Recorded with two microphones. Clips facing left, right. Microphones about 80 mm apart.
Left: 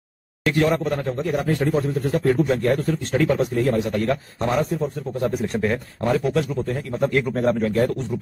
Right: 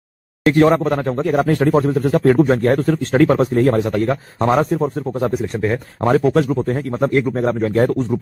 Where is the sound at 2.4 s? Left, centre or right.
Right.